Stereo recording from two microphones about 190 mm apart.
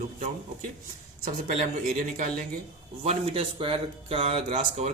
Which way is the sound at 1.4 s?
45° right (ahead or behind).